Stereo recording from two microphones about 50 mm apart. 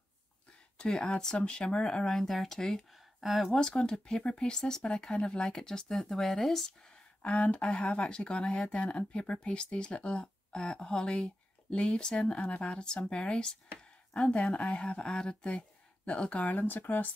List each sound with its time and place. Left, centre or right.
0.7 s speech: centre
3.2 s speech: centre
3.5 s speech: centre
7.7 s speech: centre; by 17.1 s left